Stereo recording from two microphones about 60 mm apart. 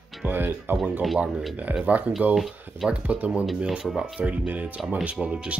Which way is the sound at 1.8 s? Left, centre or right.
Right.